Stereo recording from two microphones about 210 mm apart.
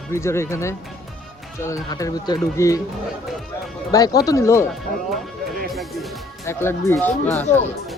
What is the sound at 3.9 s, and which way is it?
Speech, 15° left (ahead or behind).